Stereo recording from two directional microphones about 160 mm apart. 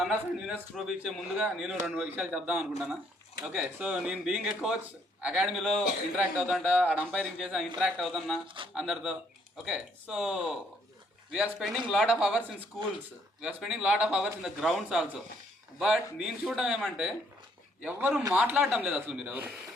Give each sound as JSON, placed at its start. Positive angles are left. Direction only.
{"t": 0.0, "sound": "a man's voice", "side_deg": 0}
{"t": 8.4, "sound": "speech", "side_deg": -30}
{"t": 8.7, "sound": "a man's voice", "side_deg": -5}